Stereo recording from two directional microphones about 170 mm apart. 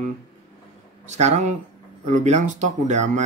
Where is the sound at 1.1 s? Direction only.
45° right (ahead or behind).